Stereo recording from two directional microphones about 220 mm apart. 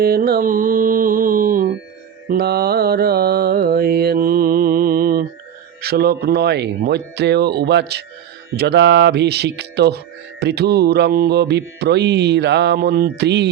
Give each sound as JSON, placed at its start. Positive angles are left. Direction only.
{"t": 0.0, "sound": "mantra", "side_deg": -40}